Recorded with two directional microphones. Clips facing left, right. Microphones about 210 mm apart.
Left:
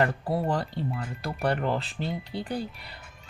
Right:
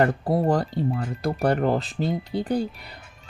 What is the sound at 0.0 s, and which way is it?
Speech, 45° right (ahead or behind).